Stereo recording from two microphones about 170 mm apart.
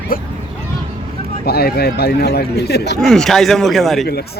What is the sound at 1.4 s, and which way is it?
Speech, 65° left (ahead or behind).